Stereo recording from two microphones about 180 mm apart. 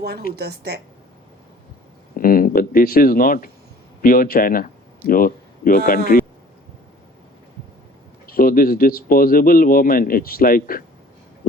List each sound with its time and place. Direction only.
0.0 s a woman's voice: 60° right (ahead or behind)
2.1 s speech: 50° left (ahead or behind)
8.3 s speech: 55° left (ahead or behind)